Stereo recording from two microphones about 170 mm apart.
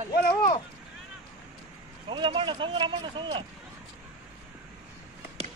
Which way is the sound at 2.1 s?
30° right (ahead or behind).